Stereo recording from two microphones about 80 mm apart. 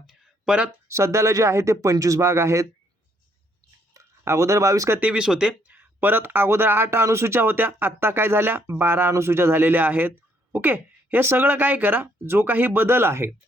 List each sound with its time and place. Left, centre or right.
0.1 s a sound: centre
0.9 s speech: right
3.9 s speech: right
4.9 s speech: centre
5.7 s speech: right